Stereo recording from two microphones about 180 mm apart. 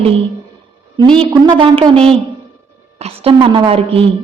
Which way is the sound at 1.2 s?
25° right (ahead or behind).